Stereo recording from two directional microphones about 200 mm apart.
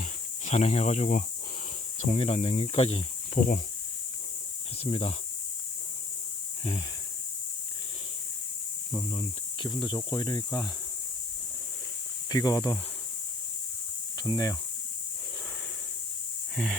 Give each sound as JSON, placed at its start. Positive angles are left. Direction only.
{"t": 0.0, "sound": "cricket", "side_deg": 35}
{"t": 2.0, "sound": "speech", "side_deg": 30}
{"t": 3.4, "sound": "speech", "side_deg": 40}
{"t": 4.8, "sound": "speech", "side_deg": 30}
{"t": 8.9, "sound": "speech", "side_deg": 25}
{"t": 12.3, "sound": "speech", "side_deg": 15}
{"t": 14.2, "sound": "speech", "side_deg": 20}